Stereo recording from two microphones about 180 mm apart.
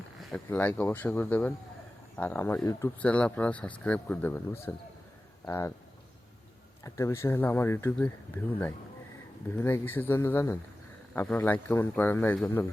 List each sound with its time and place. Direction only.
0.2 s speech: 5° left (ahead or behind)
6.8 s speech: 15° left (ahead or behind)
9.6 s speech: 15° left (ahead or behind)